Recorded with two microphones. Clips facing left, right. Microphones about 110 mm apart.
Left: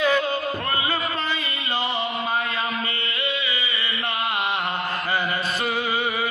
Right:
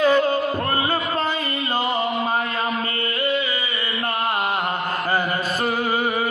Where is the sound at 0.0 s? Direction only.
40° right (ahead or behind).